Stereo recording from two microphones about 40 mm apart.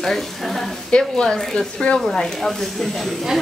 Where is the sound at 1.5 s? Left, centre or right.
Left; by 3.1 s centre.